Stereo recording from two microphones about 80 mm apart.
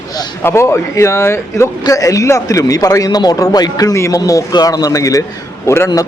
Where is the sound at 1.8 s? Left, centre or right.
Left.